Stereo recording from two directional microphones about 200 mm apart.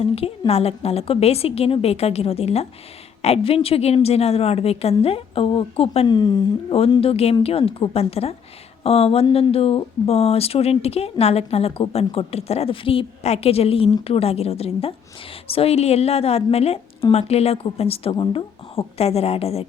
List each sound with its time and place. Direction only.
0.0 s a woman's voice: 30° left (ahead or behind)